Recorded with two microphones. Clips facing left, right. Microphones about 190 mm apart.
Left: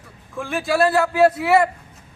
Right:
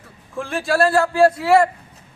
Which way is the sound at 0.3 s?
Centre (ahead or behind).